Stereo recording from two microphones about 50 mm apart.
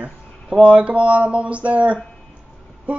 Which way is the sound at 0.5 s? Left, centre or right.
Right.